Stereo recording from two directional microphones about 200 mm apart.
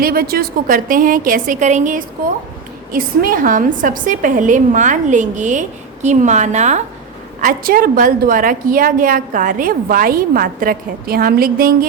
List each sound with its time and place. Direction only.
0.0 s a woman's voice: 50° right (ahead or behind)
7.4 s a woman's voice: 45° right (ahead or behind)